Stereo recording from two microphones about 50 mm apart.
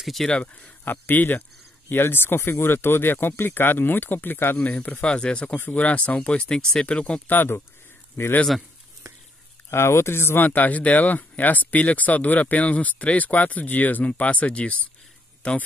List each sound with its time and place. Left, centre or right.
0.0 s speech: centre
0.4 s speech: left
0.8 s speech: left
5.0 s speech: centre
7.2 s speech: left
8.2 s speech: left
9.7 s speech: left
10.4 s speech: left